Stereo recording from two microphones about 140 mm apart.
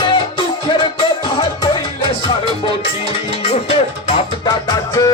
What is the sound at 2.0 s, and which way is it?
Music, 35° left (ahead or behind).